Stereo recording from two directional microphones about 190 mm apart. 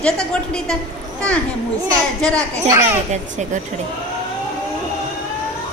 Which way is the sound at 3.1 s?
40° right (ahead or behind).